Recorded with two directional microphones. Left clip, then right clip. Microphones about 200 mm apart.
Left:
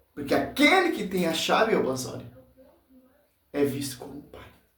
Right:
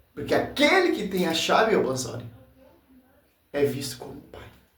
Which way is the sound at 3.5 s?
Centre (ahead or behind).